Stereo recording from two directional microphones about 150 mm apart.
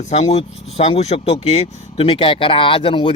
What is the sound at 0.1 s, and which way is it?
Speech, 45° left (ahead or behind).